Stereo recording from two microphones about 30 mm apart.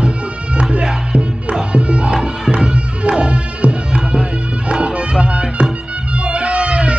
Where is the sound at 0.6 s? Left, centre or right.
Right.